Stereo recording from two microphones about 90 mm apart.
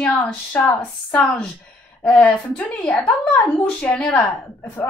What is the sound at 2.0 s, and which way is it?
Speech, 10° left (ahead or behind).